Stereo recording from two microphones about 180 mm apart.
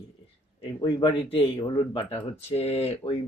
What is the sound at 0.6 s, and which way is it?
Speech, 25° left (ahead or behind).